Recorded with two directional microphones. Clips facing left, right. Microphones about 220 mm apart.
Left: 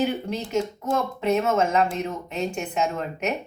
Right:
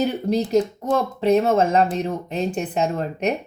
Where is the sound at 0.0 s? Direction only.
35° right (ahead or behind).